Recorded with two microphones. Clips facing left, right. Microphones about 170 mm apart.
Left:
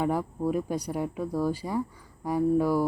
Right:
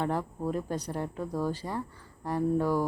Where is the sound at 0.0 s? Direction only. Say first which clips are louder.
Left 3 dB; 10° left (ahead or behind).